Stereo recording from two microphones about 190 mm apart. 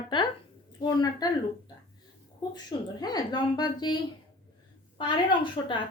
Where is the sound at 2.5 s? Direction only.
20° left (ahead or behind).